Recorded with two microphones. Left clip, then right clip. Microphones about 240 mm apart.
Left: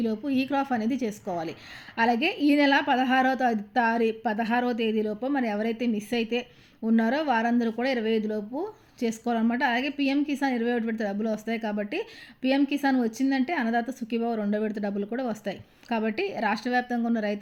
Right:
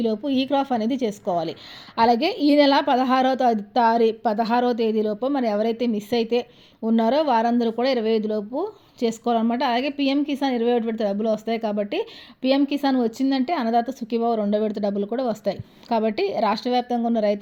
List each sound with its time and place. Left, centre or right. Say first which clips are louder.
0.3 s a woman's voice: right 3 dB; centre
8.2 s speech: right 6 dB; right
9.0 s a woman's voice: right 6 dB; centre